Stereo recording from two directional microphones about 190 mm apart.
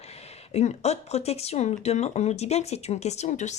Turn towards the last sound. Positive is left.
turn(degrees=40)  # may be behind; listen again after turning